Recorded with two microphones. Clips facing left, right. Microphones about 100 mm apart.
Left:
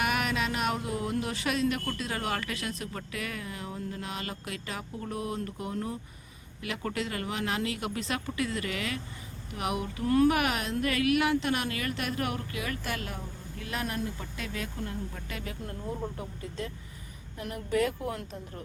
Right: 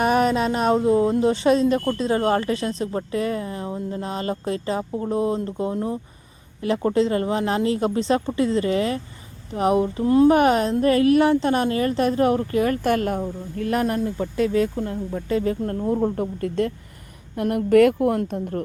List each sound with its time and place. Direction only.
0.0 s speech: 35° right (ahead or behind)
15.6 s a woman's voice: 55° right (ahead or behind)